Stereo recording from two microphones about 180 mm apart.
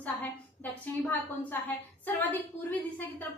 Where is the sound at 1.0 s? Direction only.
10° left (ahead or behind).